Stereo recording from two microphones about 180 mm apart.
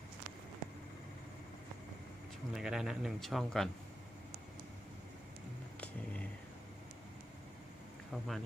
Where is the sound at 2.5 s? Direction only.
5° right (ahead or behind).